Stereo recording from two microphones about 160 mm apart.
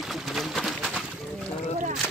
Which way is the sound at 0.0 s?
Centre (ahead or behind).